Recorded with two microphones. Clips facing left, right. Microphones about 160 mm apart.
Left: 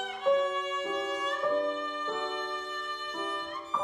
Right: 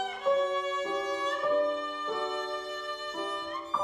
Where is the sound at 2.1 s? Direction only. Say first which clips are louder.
Right 3 dB; 10° right (ahead or behind).